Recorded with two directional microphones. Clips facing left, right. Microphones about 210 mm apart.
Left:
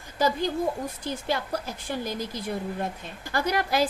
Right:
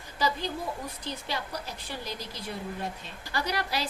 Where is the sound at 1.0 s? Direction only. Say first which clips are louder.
Left 7 dB; 50° left (ahead or behind).